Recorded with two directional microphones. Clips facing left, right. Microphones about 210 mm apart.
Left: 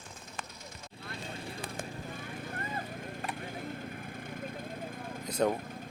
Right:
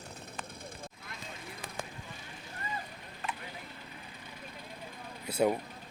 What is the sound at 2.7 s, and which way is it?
Vehicle, 45° left (ahead or behind).